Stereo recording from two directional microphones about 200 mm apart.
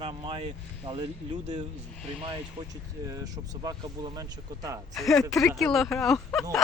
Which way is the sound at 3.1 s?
15° right (ahead or behind).